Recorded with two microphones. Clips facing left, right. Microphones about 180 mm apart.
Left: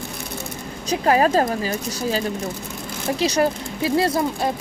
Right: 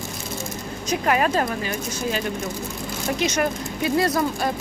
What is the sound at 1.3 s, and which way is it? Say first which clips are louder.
Speech: left 4 dB; 35° left (ahead or behind).